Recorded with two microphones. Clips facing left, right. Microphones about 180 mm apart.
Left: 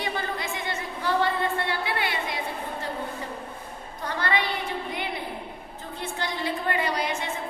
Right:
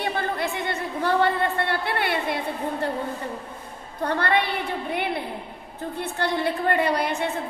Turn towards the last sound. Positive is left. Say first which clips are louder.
# right 4 dB
turn(degrees=-60)  # may be behind; listen again after turning